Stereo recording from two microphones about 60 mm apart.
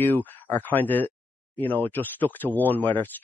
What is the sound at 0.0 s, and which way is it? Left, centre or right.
Speech, left.